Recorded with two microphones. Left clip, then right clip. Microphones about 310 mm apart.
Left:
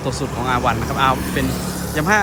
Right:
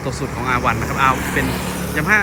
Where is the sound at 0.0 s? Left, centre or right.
Centre.